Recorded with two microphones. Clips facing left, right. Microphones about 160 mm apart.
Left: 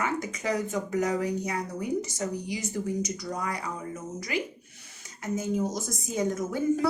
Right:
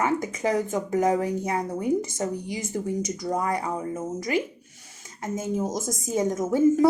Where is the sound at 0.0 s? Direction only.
50° right (ahead or behind).